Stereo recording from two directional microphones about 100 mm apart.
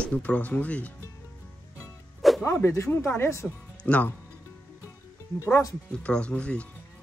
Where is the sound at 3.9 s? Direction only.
15° left (ahead or behind).